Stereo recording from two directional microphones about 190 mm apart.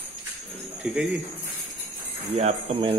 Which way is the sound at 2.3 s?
35° right (ahead or behind).